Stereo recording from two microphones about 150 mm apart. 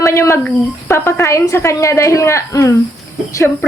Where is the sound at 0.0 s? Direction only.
20° left (ahead or behind).